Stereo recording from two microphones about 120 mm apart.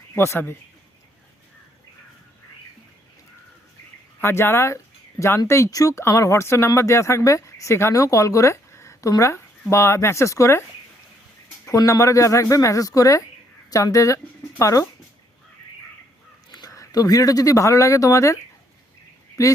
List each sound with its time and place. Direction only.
0.1 s speech: 20° left (ahead or behind)
4.2 s speech: 20° left (ahead or behind)
11.7 s speech: 25° left (ahead or behind)
16.5 s speech: 30° left (ahead or behind)